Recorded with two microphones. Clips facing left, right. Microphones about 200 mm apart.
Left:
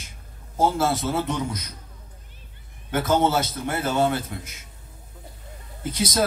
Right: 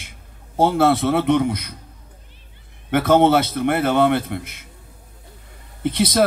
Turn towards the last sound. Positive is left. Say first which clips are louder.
# right 7 dB
turn(degrees=-60)  # may be behind; listen again after turning